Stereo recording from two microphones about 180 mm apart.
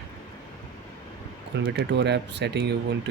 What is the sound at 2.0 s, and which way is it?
Speech, 70° right (ahead or behind).